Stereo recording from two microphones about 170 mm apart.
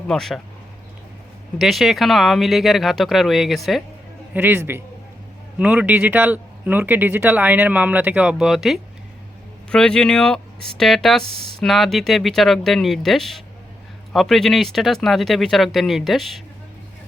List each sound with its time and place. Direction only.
0.1 s speech: centre (ahead or behind)
1.5 s speech: centre (ahead or behind)
4.4 s speech: 10° right (ahead or behind)